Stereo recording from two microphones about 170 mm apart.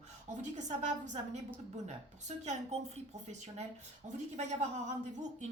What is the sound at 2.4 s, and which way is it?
Speech, 40° right (ahead or behind).